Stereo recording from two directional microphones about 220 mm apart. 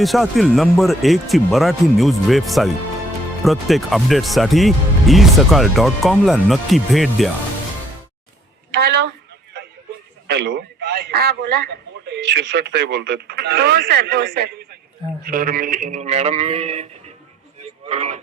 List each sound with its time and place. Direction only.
0.0 s speech: centre (ahead or behind)
8.7 s a woman's voice: 50° right (ahead or behind)
10.2 s a man's voice: 50° right (ahead or behind); by 16.8 s 25° right (ahead or behind)
17.6 s a sound: 30° right (ahead or behind)